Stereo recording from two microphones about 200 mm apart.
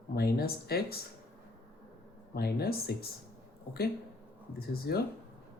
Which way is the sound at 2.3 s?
50° left (ahead or behind).